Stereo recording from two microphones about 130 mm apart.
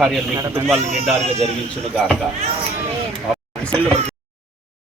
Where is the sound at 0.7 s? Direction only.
55° right (ahead or behind).